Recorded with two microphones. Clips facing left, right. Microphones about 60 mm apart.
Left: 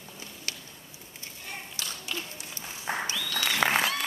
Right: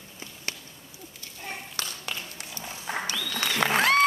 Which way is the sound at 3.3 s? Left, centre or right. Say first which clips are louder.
Right 1 dB; centre.